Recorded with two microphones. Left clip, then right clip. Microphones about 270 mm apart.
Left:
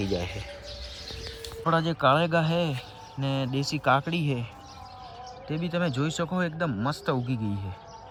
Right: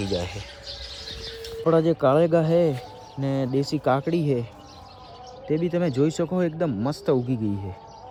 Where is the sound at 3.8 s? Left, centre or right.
Left.